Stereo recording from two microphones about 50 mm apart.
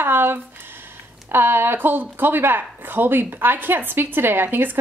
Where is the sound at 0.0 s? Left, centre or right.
Right.